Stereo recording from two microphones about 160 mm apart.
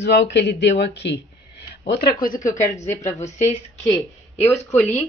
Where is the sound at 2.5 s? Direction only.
20° left (ahead or behind).